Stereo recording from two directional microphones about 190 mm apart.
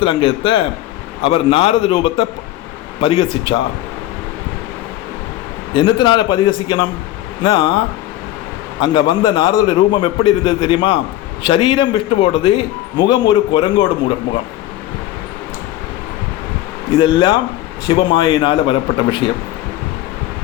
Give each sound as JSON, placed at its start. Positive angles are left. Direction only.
{"t": 0.0, "sound": "a man's voice", "side_deg": 25}
{"t": 5.7, "sound": "a man's voice", "side_deg": 25}
{"t": 8.8, "sound": "a man's voice", "side_deg": 25}
{"t": 17.0, "sound": "a man's voice", "side_deg": 25}